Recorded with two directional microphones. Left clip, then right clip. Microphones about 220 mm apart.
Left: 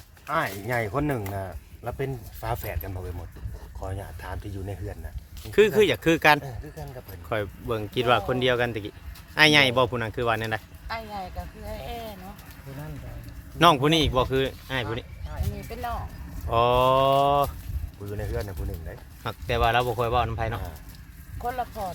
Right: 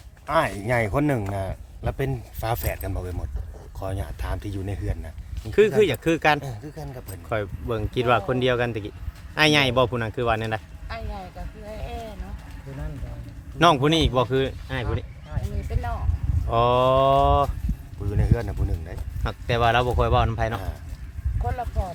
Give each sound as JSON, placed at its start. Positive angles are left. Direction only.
{"t": 0.3, "sound": "speech", "side_deg": -40}
{"t": 5.5, "sound": "speech", "side_deg": 10}
{"t": 6.4, "sound": "speech", "side_deg": -35}
{"t": 7.3, "sound": "speech", "side_deg": 5}
{"t": 10.8, "sound": "speech", "side_deg": 15}
{"t": 13.6, "sound": "speech", "side_deg": 0}
{"t": 16.5, "sound": "speech", "side_deg": 0}
{"t": 18.2, "sound": "speech", "side_deg": -45}
{"t": 19.2, "sound": "speech", "side_deg": -5}
{"t": 21.4, "sound": "speech", "side_deg": 15}